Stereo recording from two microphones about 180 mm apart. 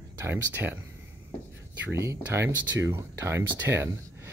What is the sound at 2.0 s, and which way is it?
Speech, 15° right (ahead or behind).